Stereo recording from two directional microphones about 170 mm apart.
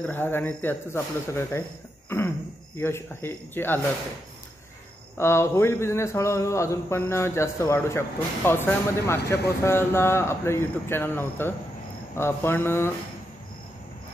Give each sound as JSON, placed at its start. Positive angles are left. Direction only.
{"t": 0.0, "sound": "a man's voice", "side_deg": 10}
{"t": 2.0, "sound": "cough", "side_deg": 15}
{"t": 2.8, "sound": "a man's voice", "side_deg": 15}
{"t": 5.1, "sound": "a man's voice", "side_deg": 15}